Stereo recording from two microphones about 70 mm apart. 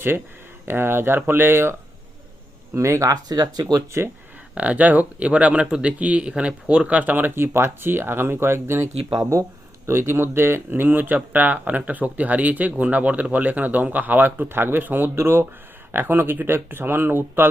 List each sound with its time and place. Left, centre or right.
0.6 s speech: right
2.7 s speech: right
3.1 s speech: right
4.5 s speech: centre